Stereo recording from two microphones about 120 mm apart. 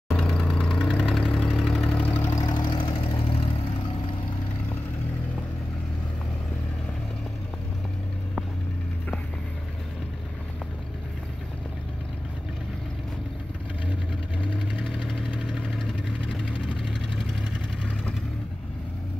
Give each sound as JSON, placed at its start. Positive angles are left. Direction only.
{"t": 0.1, "sound": "vehicle", "side_deg": 5}
{"t": 2.4, "sound": "vehicle", "side_deg": 35}
{"t": 15.0, "sound": "vehicle", "side_deg": 5}